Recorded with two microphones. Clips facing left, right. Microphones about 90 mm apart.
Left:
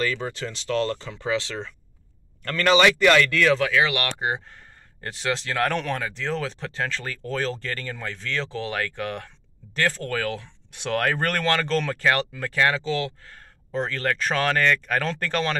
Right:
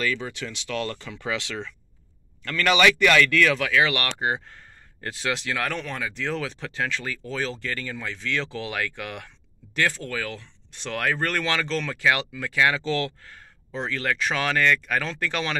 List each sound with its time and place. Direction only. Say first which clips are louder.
0.0 s speech: left 1 dB; 35° left (ahead or behind)
5.7 s speech: left 4 dB; 55° left (ahead or behind)
6.0 s speech: left 1 dB; 30° left (ahead or behind)
10.0 s speech: left 4 dB; 60° left (ahead or behind); by 12.7 s 40° left (ahead or behind)
12.7 s speech: even; 20° left (ahead or behind)
13.3 s speech: left 5 dB; 40° left (ahead or behind)